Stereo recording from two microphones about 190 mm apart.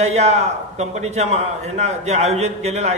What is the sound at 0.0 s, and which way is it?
A man's voice, 35° right (ahead or behind).